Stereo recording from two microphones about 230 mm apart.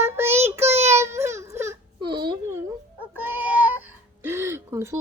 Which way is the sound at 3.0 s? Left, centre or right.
Centre.